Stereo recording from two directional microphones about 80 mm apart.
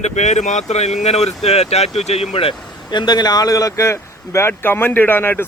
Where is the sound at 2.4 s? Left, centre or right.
Left.